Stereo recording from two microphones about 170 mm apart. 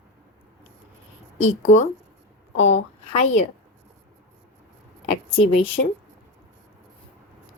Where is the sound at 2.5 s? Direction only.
90° left.